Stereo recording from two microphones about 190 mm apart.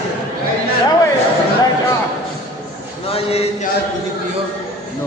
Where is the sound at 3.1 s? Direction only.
30° left (ahead or behind).